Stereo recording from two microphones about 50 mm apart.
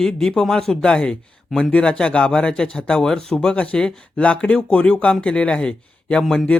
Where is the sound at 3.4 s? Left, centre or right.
Left.